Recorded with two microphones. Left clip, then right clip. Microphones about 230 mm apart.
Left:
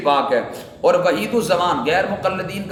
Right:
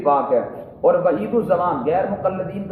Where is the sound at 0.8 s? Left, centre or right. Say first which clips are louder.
Left 1 dB; centre.